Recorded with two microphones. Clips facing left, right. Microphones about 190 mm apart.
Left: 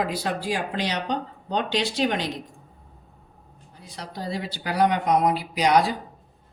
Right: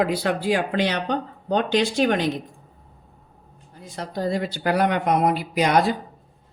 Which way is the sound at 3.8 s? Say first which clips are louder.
Right 7 dB; 50° right (ahead or behind).